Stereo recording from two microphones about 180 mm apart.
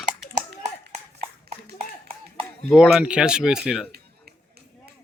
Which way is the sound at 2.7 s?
5° right (ahead or behind).